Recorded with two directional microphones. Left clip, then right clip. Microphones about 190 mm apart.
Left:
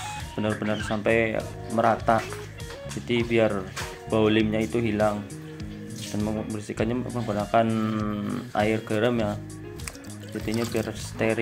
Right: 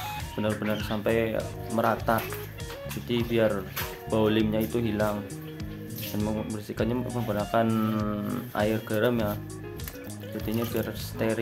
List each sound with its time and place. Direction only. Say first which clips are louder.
0.0 s speech: left 1 dB; 5° left (ahead or behind)
10.7 s speech: left 2 dB; 5° left (ahead or behind)